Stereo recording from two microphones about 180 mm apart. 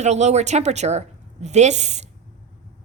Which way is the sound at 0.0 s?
40° right (ahead or behind).